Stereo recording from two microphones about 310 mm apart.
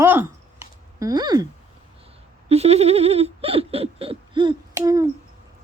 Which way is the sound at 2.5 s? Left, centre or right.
Centre.